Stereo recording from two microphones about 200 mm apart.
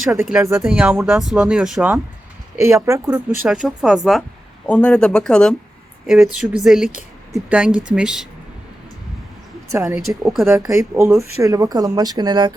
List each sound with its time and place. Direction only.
0.1 s speech: 5° right (ahead or behind)
2.6 s speech: 15° right (ahead or behind)
3.4 s speech: 5° right (ahead or behind)
9.7 s speech: 5° right (ahead or behind)
11.2 s speech: 15° right (ahead or behind)